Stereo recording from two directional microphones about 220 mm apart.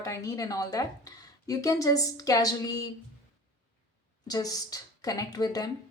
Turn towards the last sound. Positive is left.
turn(degrees=15)  # may be behind; listen again after turning